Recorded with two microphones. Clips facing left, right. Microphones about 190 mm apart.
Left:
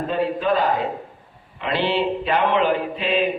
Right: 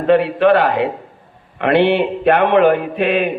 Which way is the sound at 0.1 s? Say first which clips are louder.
Right 10 dB; 75° right (ahead or behind).